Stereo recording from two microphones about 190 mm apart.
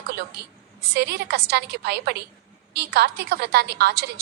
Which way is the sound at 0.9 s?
55° right (ahead or behind).